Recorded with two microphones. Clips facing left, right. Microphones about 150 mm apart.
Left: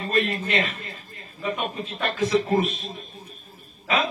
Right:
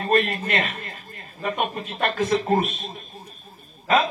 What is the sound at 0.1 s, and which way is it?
A man's voice, 45° right (ahead or behind).